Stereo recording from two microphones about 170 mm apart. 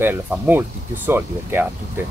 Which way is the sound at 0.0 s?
10° right (ahead or behind).